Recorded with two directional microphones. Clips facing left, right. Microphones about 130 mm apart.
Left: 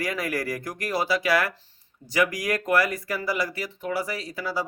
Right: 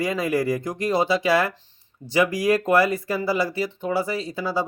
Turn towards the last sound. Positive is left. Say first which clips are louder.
# right 5 dB
turn(degrees=-25)  # may be behind; listen again after turning